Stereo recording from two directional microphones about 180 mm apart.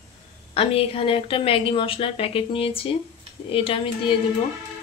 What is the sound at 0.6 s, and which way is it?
Speech, 30° left (ahead or behind).